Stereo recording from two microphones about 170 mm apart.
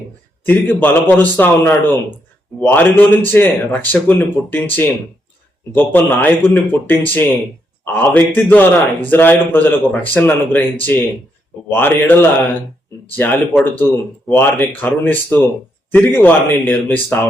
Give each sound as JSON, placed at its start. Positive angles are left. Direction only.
{"t": 0.4, "sound": "speech", "side_deg": 10}